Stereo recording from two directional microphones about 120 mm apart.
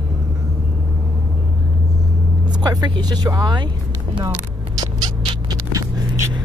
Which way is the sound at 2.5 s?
35° right (ahead or behind).